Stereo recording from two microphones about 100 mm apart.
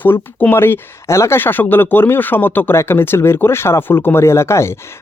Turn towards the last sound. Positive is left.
turn(degrees=25)  # may be behind; listen again after turning